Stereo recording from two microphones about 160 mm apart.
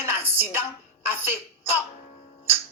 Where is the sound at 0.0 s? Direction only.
15° right (ahead or behind).